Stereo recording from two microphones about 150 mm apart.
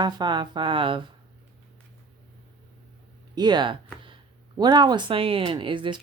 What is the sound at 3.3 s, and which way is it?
Speech, 30° right (ahead or behind).